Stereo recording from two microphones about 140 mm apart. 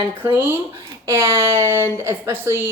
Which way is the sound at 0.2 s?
15° right (ahead or behind).